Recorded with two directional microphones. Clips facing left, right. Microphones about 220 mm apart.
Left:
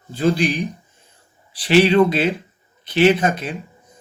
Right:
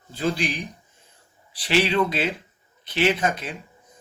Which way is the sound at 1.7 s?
55° left (ahead or behind).